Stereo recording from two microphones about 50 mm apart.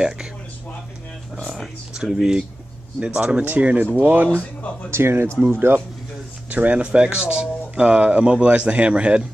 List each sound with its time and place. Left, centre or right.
1.4 s a sound: centre
3.0 s speech: right
4.9 s speech: right
6.5 s speech: right